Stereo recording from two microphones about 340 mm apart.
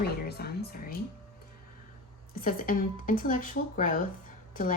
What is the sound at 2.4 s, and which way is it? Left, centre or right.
Speech, left.